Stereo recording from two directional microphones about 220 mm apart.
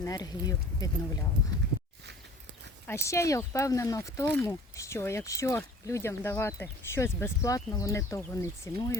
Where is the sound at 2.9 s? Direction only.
10° left (ahead or behind).